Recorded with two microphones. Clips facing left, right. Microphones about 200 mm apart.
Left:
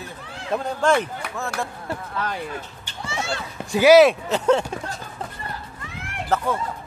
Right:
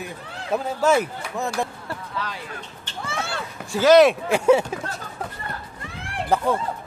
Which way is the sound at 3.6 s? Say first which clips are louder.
Left 2 dB; 15° left (ahead or behind).